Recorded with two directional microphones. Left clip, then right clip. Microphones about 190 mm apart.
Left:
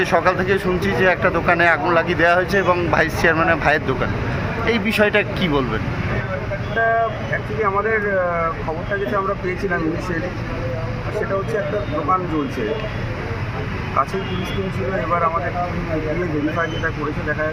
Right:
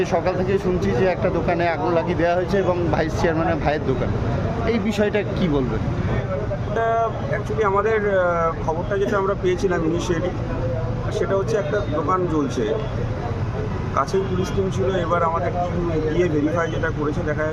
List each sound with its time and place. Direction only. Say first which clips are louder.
0.0 s speech: left 4 dB; 5° right (ahead or behind)
7.6 s speech: even; 20° right (ahead or behind)